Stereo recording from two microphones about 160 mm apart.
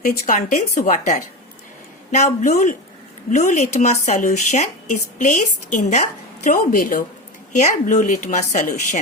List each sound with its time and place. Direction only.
0.0 s a woman's voice: 55° left (ahead or behind)